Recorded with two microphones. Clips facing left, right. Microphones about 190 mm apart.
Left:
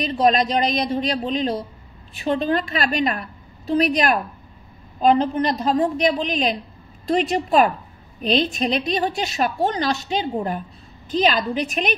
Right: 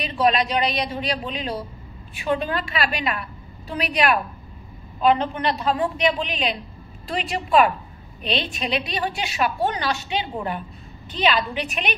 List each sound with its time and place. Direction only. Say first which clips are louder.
0.0 s a woman's voice: left 3 dB; 40° left (ahead or behind)